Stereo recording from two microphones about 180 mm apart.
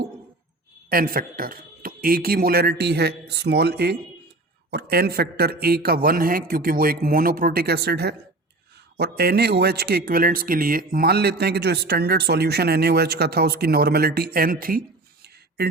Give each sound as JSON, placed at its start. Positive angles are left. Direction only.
{"t": 0.9, "sound": "a man's voice", "side_deg": -55}